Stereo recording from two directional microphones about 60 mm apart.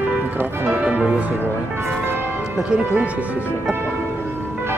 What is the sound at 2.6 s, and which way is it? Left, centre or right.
Speech, centre.